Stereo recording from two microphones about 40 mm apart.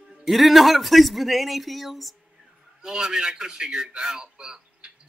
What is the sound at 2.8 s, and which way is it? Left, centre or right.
A man's voice, centre.